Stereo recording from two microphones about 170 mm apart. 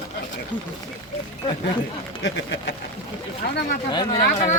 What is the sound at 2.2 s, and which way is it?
Speech, 90° left.